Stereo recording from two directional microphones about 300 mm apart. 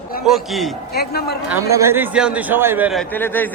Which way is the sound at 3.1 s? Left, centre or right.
Centre.